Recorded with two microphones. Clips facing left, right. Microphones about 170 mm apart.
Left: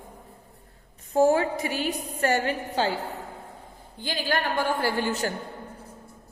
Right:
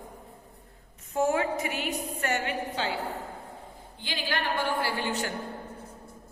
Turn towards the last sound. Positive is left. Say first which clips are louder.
# left 4 dB
turn(degrees=40)  # may be behind; listen again after turning